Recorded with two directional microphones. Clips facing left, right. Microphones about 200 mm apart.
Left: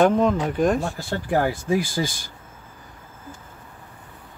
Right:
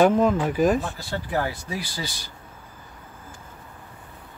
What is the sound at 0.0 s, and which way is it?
Speech, 5° right (ahead or behind).